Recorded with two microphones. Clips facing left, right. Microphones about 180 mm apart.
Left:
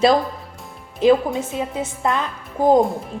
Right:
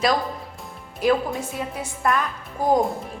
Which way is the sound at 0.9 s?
20° left (ahead or behind).